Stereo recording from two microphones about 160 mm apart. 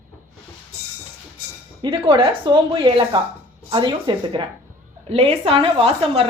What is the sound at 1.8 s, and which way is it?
A woman's voice, 35° right (ahead or behind).